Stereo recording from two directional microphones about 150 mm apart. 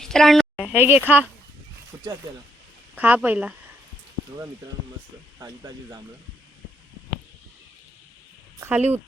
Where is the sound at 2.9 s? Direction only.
10° right (ahead or behind).